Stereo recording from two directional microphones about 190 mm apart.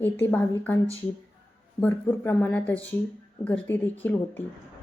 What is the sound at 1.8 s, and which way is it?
A woman's voice, 10° left (ahead or behind).